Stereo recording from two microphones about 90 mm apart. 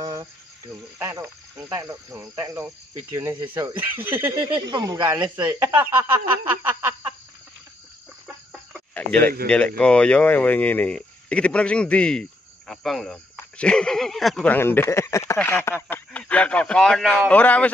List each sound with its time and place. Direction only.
0.0 s cricket: 40° right (ahead or behind)
0.9 s speech: 30° right (ahead or behind)
1.7 s cricket: 35° right (ahead or behind)
3.7 s speech: 20° right (ahead or behind)
4.6 s speech: 55° right (ahead or behind)
5.6 s speech: 20° right (ahead or behind)
8.9 s speech: 15° left (ahead or behind)
14.6 s speech: 25° left (ahead or behind)